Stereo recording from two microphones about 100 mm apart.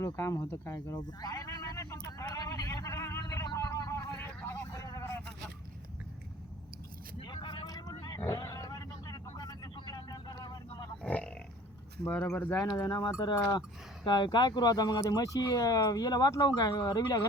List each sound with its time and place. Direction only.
0.0 s speech: 30° left (ahead or behind)
0.9 s a sound: 35° left (ahead or behind)
7.2 s vehicle: 50° left (ahead or behind)
11.0 s pig: 10° left (ahead or behind)
12.0 s speech: 15° left (ahead or behind)
12.9 s speech: 45° left (ahead or behind)